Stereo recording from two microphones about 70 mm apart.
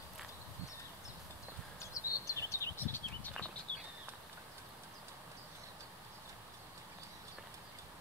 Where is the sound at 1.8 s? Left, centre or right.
Left.